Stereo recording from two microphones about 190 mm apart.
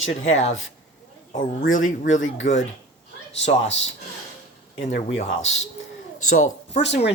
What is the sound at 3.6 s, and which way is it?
Speech, 75° left (ahead or behind).